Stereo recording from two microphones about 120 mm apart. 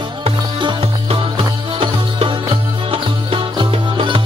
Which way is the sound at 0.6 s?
40° right (ahead or behind).